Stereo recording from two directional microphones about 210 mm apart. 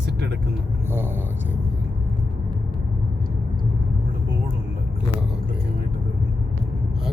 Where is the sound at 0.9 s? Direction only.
10° right (ahead or behind).